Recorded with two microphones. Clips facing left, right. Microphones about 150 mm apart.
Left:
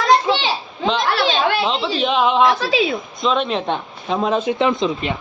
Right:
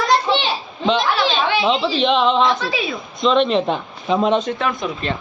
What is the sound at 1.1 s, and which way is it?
Chatter, 70° left (ahead or behind).